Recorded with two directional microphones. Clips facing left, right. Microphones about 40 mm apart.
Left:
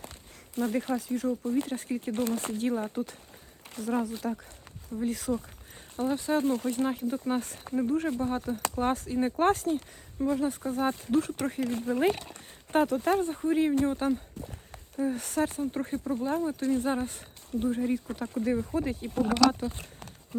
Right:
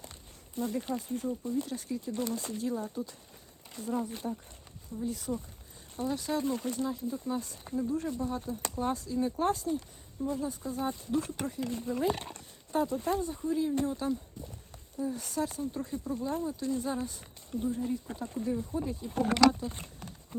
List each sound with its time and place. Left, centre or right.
0.5 s speech: left
1.5 s speech: left
3.8 s speech: left
6.0 s speech: left
13.7 s speech: left
18.4 s speech: left
19.6 s speech: left